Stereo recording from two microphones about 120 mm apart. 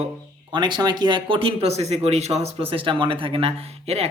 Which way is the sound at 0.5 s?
40° right (ahead or behind).